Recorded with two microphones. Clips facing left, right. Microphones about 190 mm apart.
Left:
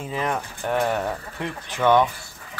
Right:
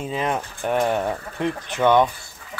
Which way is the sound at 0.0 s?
20° right (ahead or behind).